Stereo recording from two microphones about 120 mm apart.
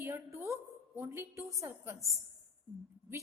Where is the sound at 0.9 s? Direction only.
20° right (ahead or behind).